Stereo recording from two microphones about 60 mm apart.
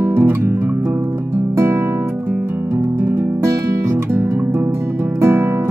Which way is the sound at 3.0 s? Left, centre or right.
Right.